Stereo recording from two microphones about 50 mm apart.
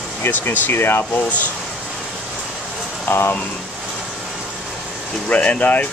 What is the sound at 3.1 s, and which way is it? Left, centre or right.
Speech, left.